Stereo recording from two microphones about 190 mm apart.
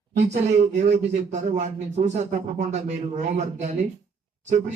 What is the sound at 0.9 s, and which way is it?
Speech, 35° right (ahead or behind).